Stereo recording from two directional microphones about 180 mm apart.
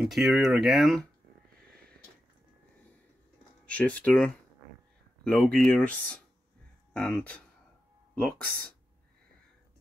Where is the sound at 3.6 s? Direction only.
10° left (ahead or behind).